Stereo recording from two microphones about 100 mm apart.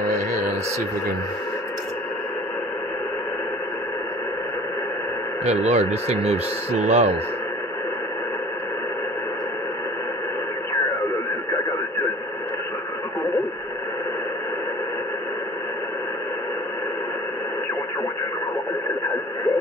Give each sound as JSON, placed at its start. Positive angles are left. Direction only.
{"t": 5.4, "sound": "speech", "side_deg": -90}